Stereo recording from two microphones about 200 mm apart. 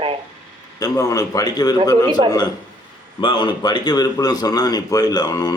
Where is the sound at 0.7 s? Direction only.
15° left (ahead or behind).